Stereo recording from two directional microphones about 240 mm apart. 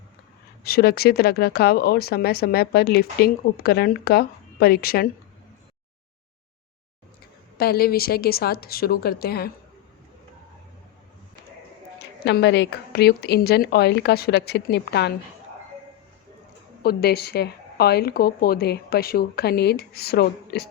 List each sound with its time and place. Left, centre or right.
0.6 s speech: left
7.6 s speech: left
12.2 s a woman's voice: left
16.8 s speech: left